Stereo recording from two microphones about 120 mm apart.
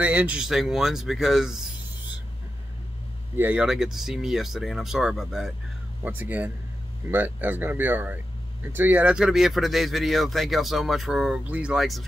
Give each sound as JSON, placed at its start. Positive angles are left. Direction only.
{"t": 0.0, "sound": "speech", "side_deg": -10}
{"t": 3.3, "sound": "speech", "side_deg": -15}
{"t": 3.6, "sound": "speech", "side_deg": -5}
{"t": 6.0, "sound": "speech", "side_deg": -15}